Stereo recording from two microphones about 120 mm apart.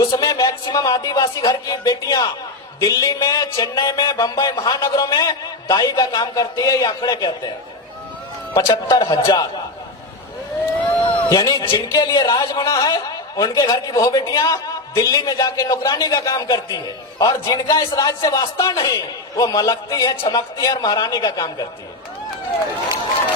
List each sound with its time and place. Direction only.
0.0 s a man's voice: 30° left (ahead or behind)
8.5 s a man's voice: 30° left (ahead or behind)
11.0 s a man's voice: 40° left (ahead or behind)